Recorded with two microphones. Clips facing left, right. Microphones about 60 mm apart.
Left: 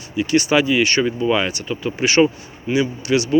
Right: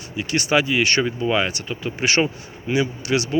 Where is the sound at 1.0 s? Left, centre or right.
Right.